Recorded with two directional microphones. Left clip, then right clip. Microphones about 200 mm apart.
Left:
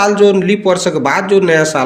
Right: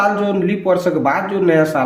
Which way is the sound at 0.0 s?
35° left (ahead or behind).